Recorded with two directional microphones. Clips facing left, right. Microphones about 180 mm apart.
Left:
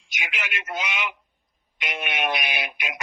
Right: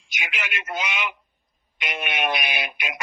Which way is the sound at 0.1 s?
60° right (ahead or behind).